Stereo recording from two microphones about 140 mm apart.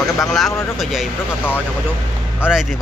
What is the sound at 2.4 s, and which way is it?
Speech, 10° right (ahead or behind).